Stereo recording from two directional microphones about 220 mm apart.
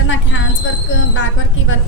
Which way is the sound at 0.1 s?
60° left (ahead or behind).